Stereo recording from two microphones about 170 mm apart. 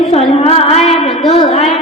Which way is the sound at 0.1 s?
35° left (ahead or behind).